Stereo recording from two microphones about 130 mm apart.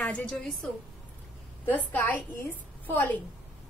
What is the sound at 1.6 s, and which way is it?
A woman's voice, 15° left (ahead or behind).